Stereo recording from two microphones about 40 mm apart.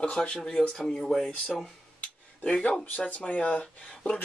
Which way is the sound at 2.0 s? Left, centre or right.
Left.